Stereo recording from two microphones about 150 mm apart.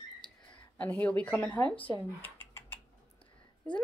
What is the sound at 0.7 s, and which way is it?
A woman's voice, 10° left (ahead or behind).